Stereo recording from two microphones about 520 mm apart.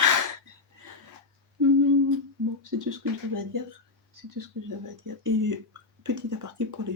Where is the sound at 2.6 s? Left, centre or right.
Right.